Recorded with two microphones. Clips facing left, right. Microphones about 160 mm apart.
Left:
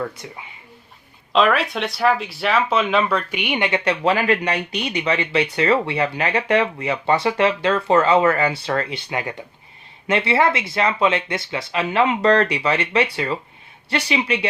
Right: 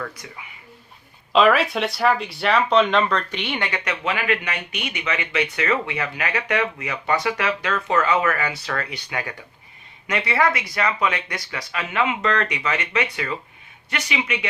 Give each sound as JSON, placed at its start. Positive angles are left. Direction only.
{"t": 0.0, "sound": "speech", "side_deg": 25}
{"t": 1.3, "sound": "speech", "side_deg": 0}
{"t": 3.8, "sound": "speech", "side_deg": 35}